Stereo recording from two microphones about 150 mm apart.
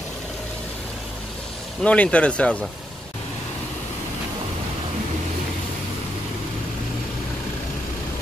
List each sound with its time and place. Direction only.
1.8 s speech: 5° left (ahead or behind)